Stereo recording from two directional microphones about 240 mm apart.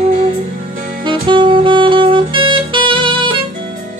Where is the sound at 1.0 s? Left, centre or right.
Centre.